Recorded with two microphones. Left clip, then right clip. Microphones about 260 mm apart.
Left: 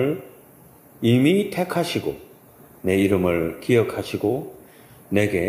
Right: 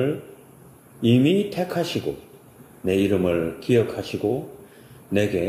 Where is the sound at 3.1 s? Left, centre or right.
Left.